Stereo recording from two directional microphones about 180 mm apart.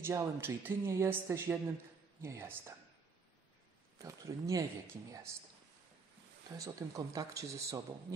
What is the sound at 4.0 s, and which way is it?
Speech, 20° right (ahead or behind).